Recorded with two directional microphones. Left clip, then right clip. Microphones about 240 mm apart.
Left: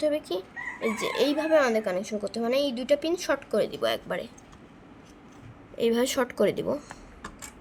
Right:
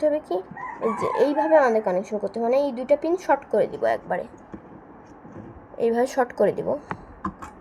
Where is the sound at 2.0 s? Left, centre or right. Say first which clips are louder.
Right 5 dB; left.